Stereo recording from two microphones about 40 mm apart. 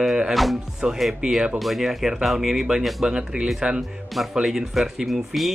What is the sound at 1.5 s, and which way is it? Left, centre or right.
Speech, centre.